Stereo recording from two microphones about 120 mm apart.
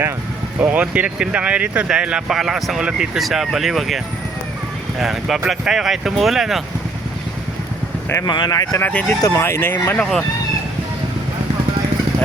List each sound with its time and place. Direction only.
0.6 s speech: 10° right (ahead or behind)
8.1 s speech: 35° left (ahead or behind)
8.8 s speech: 10° left (ahead or behind)
9.2 s speech: 25° left (ahead or behind)
10.0 s speech: 5° left (ahead or behind)